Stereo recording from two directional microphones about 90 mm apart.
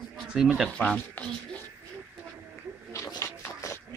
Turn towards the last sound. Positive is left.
turn(degrees=30)  # may be behind; listen again after turning